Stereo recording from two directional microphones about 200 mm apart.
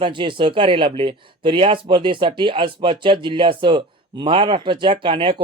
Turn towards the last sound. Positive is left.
turn(degrees=-25)  # may be behind; listen again after turning